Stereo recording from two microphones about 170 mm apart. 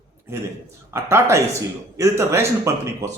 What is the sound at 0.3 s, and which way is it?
Speech, 15° right (ahead or behind).